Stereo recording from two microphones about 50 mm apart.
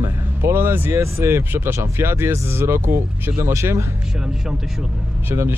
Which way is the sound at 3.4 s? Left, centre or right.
Right.